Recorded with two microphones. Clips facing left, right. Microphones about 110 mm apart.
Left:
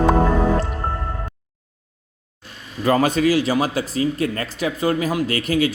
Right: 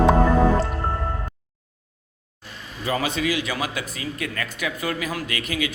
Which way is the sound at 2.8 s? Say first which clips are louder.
Left 8 dB; 50° left (ahead or behind).